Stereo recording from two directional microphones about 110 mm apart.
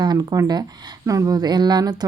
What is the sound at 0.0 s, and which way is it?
Speech, 40° right (ahead or behind).